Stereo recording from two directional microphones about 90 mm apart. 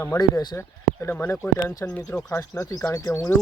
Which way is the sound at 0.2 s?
40° left (ahead or behind).